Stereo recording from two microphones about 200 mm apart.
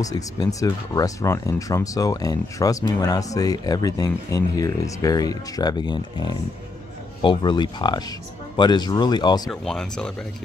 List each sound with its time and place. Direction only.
0.0 s speech: 20° left (ahead or behind)
9.5 s speech: 5° left (ahead or behind)